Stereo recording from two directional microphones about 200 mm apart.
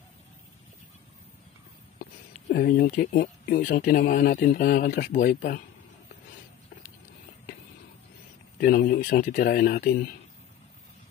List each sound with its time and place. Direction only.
2.5 s speech: 45° left (ahead or behind)
8.5 s speech: 45° left (ahead or behind)